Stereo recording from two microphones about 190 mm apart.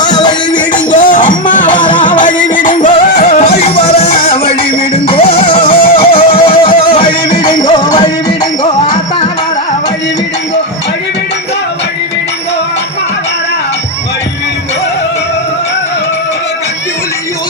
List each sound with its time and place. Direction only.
0.0 s music: 20° left (ahead or behind)
0.9 s music: 40° left (ahead or behind); by 9.3 s 25° left (ahead or behind)